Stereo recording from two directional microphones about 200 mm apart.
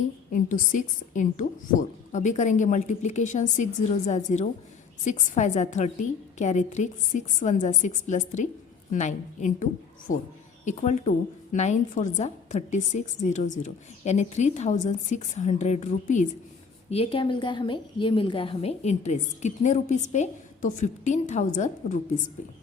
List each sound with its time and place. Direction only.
0.3 s a woman's voice: 40° left (ahead or behind)